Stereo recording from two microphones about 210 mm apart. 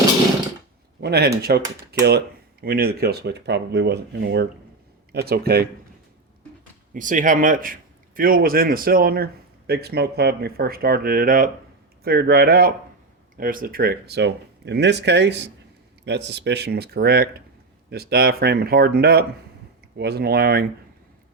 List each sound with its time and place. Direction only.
1.0 s speech: 50° right (ahead or behind)
6.9 s speech: 40° right (ahead or behind)